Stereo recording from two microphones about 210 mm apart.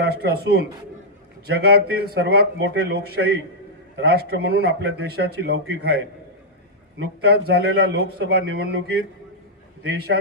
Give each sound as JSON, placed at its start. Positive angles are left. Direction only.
{"t": 0.0, "sound": "speech", "side_deg": -50}
{"t": 7.2, "sound": "speech", "side_deg": -50}
{"t": 9.8, "sound": "speech", "side_deg": -50}